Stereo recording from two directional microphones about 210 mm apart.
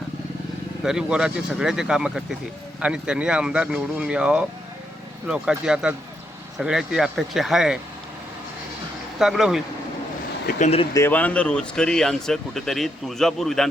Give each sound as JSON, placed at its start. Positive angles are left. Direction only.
{"t": 0.9, "sound": "speech", "side_deg": -5}
{"t": 9.1, "sound": "speech", "side_deg": 0}
{"t": 10.4, "sound": "speech", "side_deg": 30}
{"t": 10.9, "sound": "speech", "side_deg": 10}